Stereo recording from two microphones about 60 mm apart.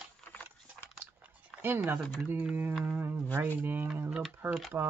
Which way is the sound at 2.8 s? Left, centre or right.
Right.